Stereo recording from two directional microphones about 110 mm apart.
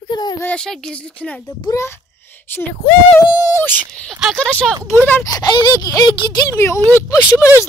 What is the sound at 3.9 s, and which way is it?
Speech, 5° left (ahead or behind).